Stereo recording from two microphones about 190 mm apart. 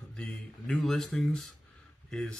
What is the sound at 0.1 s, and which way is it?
Speech, 5° left (ahead or behind).